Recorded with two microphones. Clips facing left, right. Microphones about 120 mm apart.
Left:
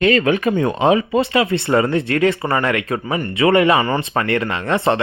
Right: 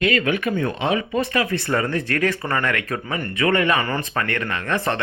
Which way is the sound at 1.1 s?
25° left (ahead or behind).